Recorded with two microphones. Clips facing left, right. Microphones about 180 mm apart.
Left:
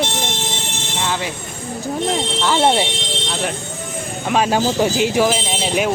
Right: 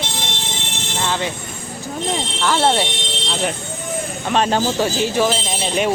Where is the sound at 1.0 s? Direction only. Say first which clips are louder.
Right 1 dB; 5° left (ahead or behind).